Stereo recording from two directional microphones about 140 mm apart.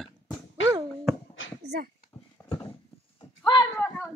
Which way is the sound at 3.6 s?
20° left (ahead or behind).